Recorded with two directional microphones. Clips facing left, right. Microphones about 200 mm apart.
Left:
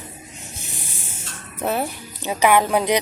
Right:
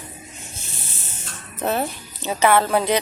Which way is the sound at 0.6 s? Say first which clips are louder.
Left 2 dB; 15° left (ahead or behind).